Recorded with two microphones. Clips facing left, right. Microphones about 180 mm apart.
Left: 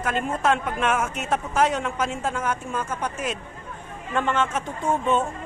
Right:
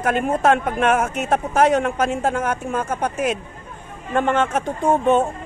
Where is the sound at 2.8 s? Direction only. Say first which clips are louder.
Right 6 dB; 40° right (ahead or behind).